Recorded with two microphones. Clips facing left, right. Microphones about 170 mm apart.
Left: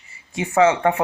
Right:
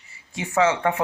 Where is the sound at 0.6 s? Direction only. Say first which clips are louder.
Left 4 dB; 15° left (ahead or behind).